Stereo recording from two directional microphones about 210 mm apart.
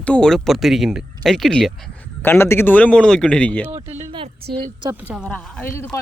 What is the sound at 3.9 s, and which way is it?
Speech, 30° right (ahead or behind).